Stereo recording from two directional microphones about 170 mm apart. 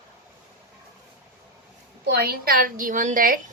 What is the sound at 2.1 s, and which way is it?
A woman's voice, 65° right (ahead or behind).